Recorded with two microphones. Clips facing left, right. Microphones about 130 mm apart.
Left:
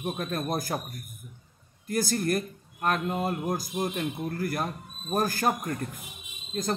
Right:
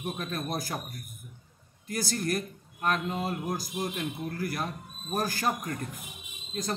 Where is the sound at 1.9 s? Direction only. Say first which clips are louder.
Left 4 dB; 50° left (ahead or behind).